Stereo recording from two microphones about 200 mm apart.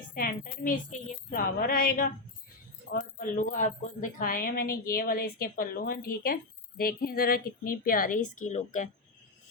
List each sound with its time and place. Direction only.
0.1 s music: 45° left (ahead or behind)